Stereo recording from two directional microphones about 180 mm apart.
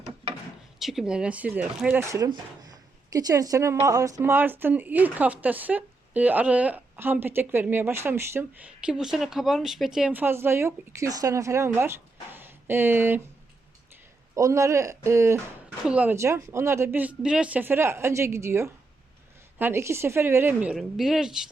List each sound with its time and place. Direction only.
0.8 s speech: centre (ahead or behind)
14.3 s speech: 15° right (ahead or behind)